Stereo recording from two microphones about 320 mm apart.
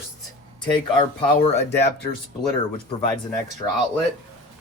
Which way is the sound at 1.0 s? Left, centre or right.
Centre.